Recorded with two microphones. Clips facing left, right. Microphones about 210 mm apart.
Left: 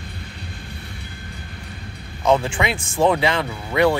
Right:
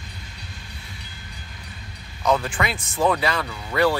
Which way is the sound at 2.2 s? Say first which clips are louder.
Left 3 dB; 25° left (ahead or behind).